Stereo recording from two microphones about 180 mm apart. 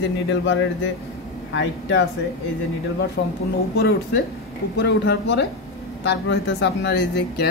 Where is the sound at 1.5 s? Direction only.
85° left.